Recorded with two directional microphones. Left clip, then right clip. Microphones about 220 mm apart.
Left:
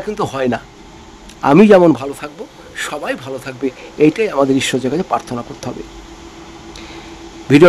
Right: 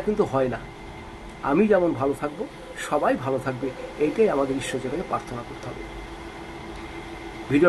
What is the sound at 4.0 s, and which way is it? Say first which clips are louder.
Speech: left 8 dB; 55° left (ahead or behind).